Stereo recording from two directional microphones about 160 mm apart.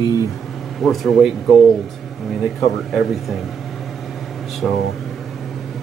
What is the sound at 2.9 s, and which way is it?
Speech, centre (ahead or behind).